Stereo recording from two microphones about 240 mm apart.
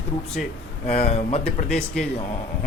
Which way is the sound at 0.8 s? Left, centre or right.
Left.